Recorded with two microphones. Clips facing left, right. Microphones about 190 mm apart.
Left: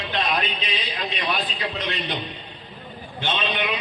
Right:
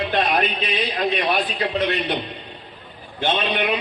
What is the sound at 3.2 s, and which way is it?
Speech, 55° right (ahead or behind).